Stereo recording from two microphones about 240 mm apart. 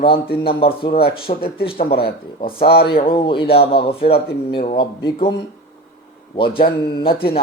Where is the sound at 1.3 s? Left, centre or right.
Left.